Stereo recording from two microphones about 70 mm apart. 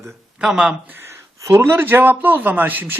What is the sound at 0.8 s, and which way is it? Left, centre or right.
Speech, right.